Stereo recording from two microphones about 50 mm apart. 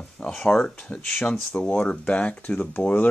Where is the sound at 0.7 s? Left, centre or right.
Left.